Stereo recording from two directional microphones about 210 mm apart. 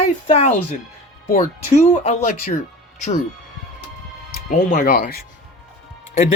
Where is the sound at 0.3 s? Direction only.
30° left (ahead or behind).